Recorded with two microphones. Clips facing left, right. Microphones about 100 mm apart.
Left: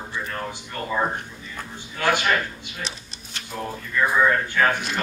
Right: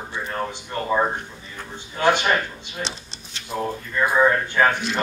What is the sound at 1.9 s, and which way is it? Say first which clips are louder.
A man's voice: right 3 dB; 25° right (ahead or behind).